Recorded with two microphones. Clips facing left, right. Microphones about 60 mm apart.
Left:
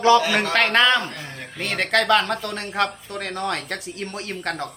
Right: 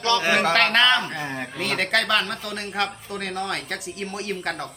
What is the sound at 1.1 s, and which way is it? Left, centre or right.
Speech, right.